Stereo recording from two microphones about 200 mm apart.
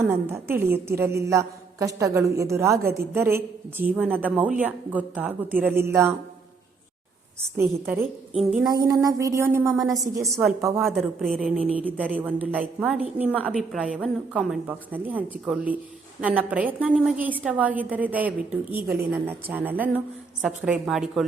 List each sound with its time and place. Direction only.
0.0 s a woman's voice: 15° right (ahead or behind)
7.5 s a woman's voice: 10° right (ahead or behind)
9.7 s a woman's voice: centre (ahead or behind)